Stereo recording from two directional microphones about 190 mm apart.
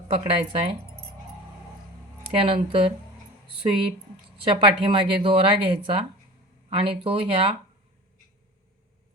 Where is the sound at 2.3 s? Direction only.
30° right (ahead or behind).